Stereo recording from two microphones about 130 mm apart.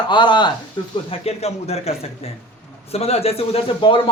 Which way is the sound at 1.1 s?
55° left (ahead or behind).